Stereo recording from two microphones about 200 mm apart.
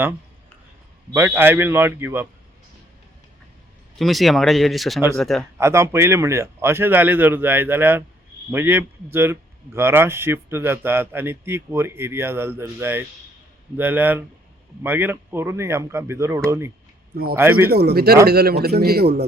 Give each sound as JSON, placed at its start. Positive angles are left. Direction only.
{"t": 1.1, "sound": "speech", "side_deg": -10}
{"t": 3.9, "sound": "speech", "side_deg": 0}
{"t": 5.5, "sound": "speech", "side_deg": -15}
{"t": 17.7, "sound": "a man's voice", "side_deg": -50}